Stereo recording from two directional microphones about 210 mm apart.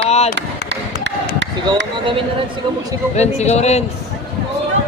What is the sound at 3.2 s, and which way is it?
Speech, 30° left (ahead or behind).